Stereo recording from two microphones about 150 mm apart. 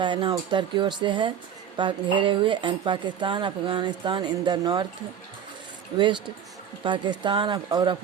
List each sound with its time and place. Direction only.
0.0 s speech: 30° right (ahead or behind)
6.8 s speech: 30° right (ahead or behind)